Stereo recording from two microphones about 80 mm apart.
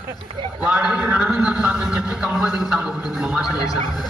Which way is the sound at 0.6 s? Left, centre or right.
Centre.